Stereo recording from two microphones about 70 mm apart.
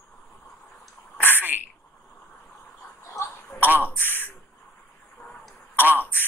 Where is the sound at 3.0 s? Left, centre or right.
Left.